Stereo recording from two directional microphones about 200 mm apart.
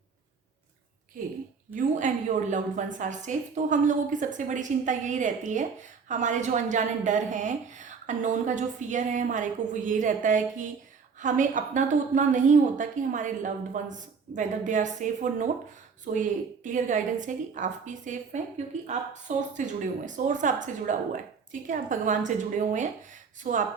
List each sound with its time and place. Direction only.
1.2 s a woman's voice: 45° right (ahead or behind)